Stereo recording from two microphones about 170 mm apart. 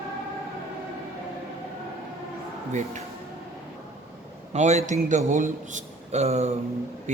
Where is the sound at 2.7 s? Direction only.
40° right (ahead or behind).